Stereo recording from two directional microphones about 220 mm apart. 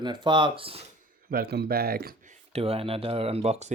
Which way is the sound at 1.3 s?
45° right (ahead or behind).